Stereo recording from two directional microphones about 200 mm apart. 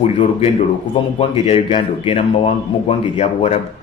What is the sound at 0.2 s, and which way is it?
A man's voice, 30° left (ahead or behind).